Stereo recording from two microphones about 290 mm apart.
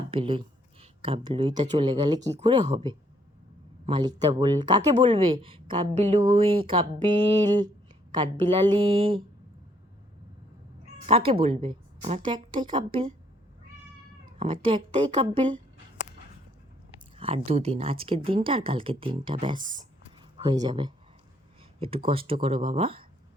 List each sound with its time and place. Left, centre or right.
0.1 s a woman's voice: centre
11.0 s a woman's voice: centre
14.3 s a woman's voice: centre
17.2 s speech: right
19.6 s speech: right
20.3 s speech: centre